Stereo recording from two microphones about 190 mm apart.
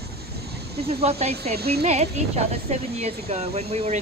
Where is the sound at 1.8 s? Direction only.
35° right (ahead or behind).